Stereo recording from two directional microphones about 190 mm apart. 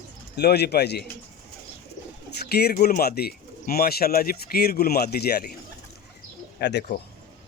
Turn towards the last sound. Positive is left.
turn(degrees=65)  # may be behind; listen again after turning